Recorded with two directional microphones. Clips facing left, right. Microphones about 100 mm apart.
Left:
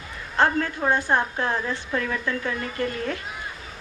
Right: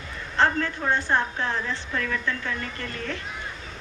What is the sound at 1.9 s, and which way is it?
Speech, 25° left (ahead or behind).